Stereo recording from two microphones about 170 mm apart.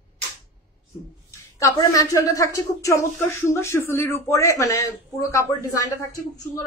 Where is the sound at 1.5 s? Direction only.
20° left (ahead or behind).